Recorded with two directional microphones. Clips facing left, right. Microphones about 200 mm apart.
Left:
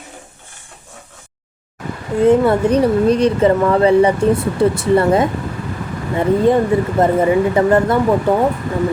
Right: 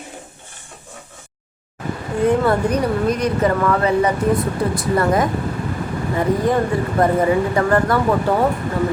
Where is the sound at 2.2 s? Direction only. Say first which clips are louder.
Left 4 dB; 25° left (ahead or behind).